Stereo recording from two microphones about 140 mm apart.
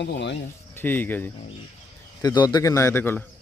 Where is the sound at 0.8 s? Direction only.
15° left (ahead or behind).